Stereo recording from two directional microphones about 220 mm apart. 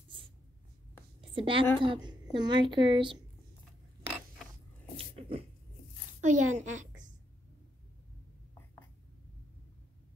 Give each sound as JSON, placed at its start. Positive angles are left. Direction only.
{"t": 1.3, "sound": "a woman's voice", "side_deg": -25}
{"t": 4.9, "sound": "a sound", "side_deg": -25}
{"t": 6.2, "sound": "a woman's voice", "side_deg": -35}